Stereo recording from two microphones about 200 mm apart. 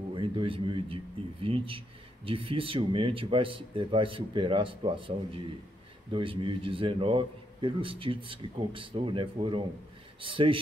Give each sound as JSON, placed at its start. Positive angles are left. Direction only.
{"t": 0.1, "sound": "a man's voice", "side_deg": -25}